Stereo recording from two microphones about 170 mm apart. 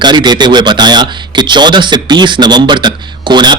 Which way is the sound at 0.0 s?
25° right (ahead or behind).